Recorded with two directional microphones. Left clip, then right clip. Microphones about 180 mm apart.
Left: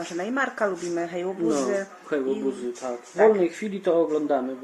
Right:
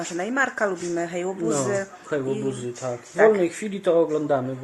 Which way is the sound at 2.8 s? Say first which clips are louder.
Right 1 dB; 20° right (ahead or behind).